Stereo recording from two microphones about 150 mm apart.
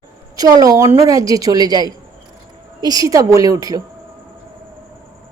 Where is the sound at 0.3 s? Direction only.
25° right (ahead or behind).